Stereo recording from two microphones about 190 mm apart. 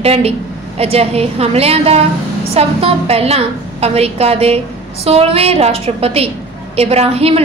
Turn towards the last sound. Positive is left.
turn(degrees=-30)  # may be behind; listen again after turning